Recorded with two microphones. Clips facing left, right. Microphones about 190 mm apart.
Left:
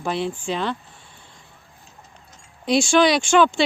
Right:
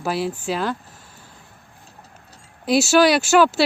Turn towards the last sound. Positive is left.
turn(degrees=-5)  # may be behind; listen again after turning